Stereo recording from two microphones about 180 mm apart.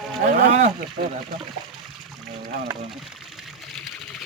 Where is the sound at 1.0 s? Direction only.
55° right (ahead or behind).